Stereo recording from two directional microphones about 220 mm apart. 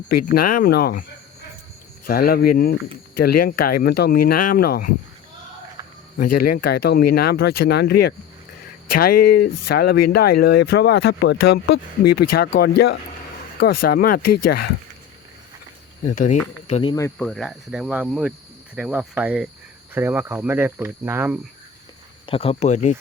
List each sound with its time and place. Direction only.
0.0 s speech: 45° left (ahead or behind)
2.0 s speech: 40° left (ahead or behind)
6.1 s speech: 40° left (ahead or behind)
9.3 s speech: 50° left (ahead or behind)
16.0 s speech: 35° left (ahead or behind)
17.2 s speech: centre (ahead or behind)
22.3 s speech: 25° left (ahead or behind)